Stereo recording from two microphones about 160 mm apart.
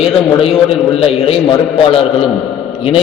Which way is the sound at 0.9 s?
35° left (ahead or behind).